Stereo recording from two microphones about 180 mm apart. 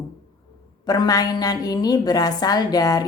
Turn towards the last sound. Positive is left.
turn(degrees=20)  # may be behind; listen again after turning